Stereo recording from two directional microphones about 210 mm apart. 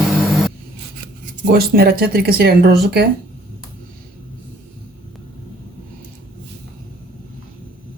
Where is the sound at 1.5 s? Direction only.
45° right (ahead or behind).